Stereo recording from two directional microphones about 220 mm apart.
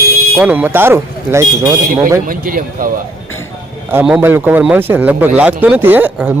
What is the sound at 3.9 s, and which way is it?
A man's voice, 10° right (ahead or behind).